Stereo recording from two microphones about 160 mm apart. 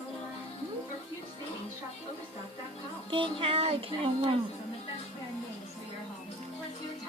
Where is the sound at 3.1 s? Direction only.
35° right (ahead or behind).